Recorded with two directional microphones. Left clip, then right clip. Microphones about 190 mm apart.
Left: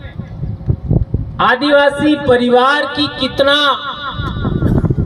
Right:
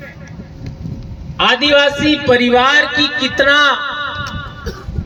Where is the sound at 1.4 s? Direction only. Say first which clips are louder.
Even; 10° right (ahead or behind).